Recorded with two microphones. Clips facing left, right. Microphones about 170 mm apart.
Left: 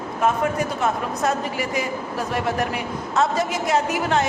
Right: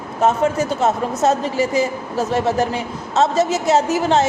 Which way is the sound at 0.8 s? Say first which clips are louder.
Right 7 dB; 25° right (ahead or behind).